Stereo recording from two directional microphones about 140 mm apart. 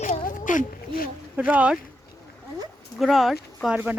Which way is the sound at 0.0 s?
70° left (ahead or behind).